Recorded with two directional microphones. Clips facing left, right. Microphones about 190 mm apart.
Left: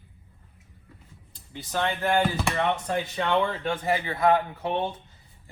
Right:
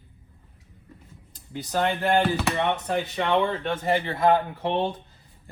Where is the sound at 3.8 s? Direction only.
30° right (ahead or behind).